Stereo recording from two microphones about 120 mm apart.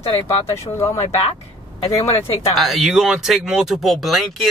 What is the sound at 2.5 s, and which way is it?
Speech, centre (ahead or behind).